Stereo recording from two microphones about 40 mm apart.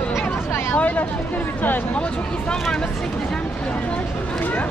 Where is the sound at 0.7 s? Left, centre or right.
Left.